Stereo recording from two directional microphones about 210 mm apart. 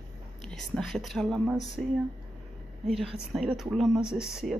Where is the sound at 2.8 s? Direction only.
Centre (ahead or behind).